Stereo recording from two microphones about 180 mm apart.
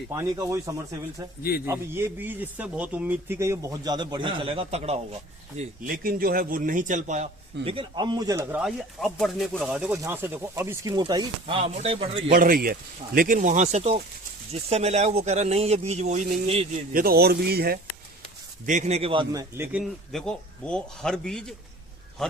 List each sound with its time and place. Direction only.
0.1 s speech: 20° right (ahead or behind); by 4.9 s 35° right (ahead or behind)
6.0 s a man's voice: 55° right (ahead or behind)
7.6 s speech: 30° right (ahead or behind)
8.6 s a man's voice: centre (ahead or behind); by 12.2 s 30° right (ahead or behind)
12.3 s a man's voice: 50° right (ahead or behind)
16.9 s speech: 55° right (ahead or behind)
18.6 s speech: 45° right (ahead or behind); by 19.6 s 20° right (ahead or behind)
19.7 s a man's voice: centre (ahead or behind)